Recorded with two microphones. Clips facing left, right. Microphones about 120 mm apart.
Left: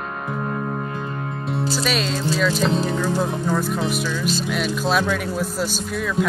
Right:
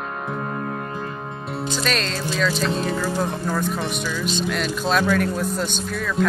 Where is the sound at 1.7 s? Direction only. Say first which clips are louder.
Right 1 dB; 5° left (ahead or behind).